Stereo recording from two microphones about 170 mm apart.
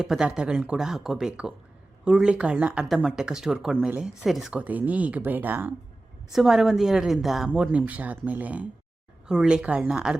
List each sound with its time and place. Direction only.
0.0 s speech: 5° right (ahead or behind)